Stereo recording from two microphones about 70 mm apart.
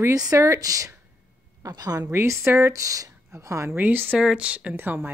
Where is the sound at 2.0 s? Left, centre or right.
Right.